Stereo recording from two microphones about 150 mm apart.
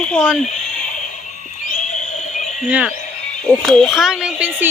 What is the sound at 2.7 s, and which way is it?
Speech, 10° right (ahead or behind).